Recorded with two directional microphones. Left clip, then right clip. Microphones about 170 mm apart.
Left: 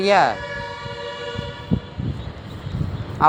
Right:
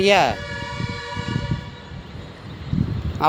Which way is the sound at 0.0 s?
30° right (ahead or behind).